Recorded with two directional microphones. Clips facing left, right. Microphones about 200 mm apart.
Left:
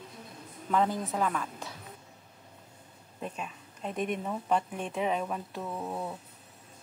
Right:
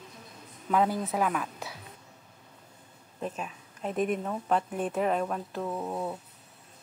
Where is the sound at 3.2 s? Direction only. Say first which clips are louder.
Right 3 dB; 5° right (ahead or behind).